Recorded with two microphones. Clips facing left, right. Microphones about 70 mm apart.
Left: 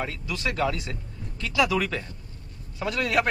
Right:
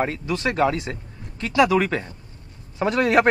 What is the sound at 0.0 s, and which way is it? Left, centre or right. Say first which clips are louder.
Speech: right 7 dB; right.